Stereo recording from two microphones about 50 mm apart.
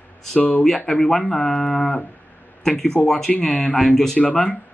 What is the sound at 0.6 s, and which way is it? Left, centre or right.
Speech, centre.